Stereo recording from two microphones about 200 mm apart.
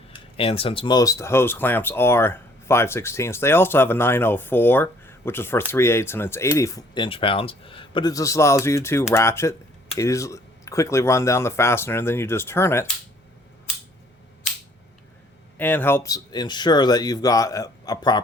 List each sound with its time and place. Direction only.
0.3 s speech: 25° left (ahead or behind); by 12.9 s 10° left (ahead or behind)
15.5 s speech: 10° left (ahead or behind)